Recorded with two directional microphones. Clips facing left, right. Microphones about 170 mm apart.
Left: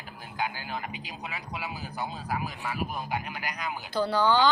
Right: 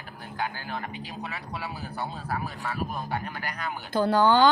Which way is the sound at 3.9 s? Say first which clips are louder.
Right 4 dB; 50° right (ahead or behind).